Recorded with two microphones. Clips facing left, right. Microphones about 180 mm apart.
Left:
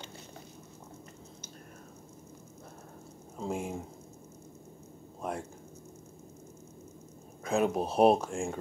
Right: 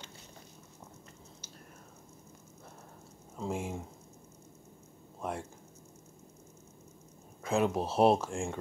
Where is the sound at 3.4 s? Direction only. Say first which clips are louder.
Left 1 dB; 15° left (ahead or behind).